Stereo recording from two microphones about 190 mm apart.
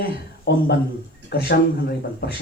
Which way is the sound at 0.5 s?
60° left (ahead or behind).